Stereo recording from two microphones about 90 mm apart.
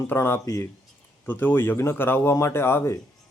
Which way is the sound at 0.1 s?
30° left (ahead or behind).